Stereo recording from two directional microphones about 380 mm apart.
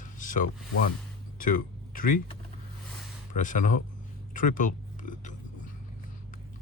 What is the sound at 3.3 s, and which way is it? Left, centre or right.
Speech, centre.